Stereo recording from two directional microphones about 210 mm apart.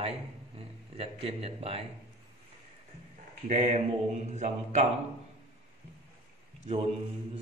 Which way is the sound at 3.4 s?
35° right (ahead or behind).